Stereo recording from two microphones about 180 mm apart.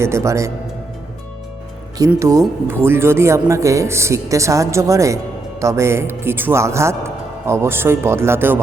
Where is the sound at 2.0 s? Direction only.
15° right (ahead or behind).